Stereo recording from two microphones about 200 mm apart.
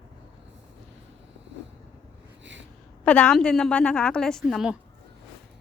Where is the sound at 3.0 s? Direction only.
5° left (ahead or behind).